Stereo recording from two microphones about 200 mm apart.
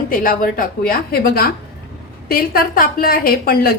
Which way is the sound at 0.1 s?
45° left (ahead or behind).